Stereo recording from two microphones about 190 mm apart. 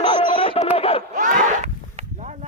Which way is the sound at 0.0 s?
25° left (ahead or behind).